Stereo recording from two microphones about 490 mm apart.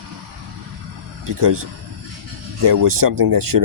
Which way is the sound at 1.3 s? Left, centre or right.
Right.